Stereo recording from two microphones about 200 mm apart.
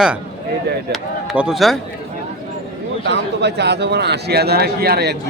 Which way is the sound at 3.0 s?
60° right (ahead or behind).